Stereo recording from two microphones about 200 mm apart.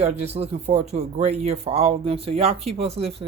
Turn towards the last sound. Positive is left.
turn(degrees=-30)  # may be behind; listen again after turning